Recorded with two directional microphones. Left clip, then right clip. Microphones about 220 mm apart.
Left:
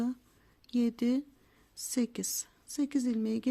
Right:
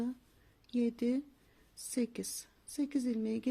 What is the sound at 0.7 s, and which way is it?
A woman's voice, 20° left (ahead or behind).